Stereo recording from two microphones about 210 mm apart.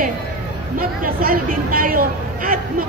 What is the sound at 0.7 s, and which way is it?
A woman's voice, 40° right (ahead or behind).